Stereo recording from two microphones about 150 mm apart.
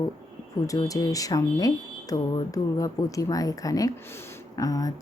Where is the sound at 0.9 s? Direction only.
25° left (ahead or behind).